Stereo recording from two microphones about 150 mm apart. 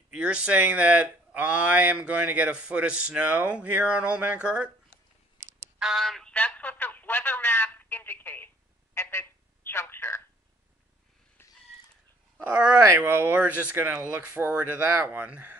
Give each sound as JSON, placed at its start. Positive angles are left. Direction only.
{"t": 0.1, "sound": "speech", "side_deg": -10}
{"t": 5.8, "sound": "a sound", "side_deg": 0}
{"t": 8.9, "sound": "telephone", "side_deg": 15}
{"t": 12.4, "sound": "speech", "side_deg": -10}